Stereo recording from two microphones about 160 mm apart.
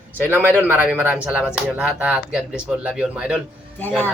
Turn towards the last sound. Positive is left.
turn(degrees=10)  # may be behind; listen again after turning